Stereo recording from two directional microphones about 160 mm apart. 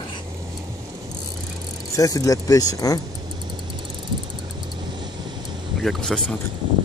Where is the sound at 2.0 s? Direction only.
20° left (ahead or behind).